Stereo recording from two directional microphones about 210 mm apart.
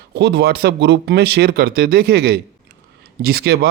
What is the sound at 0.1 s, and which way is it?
Speech, 50° right (ahead or behind).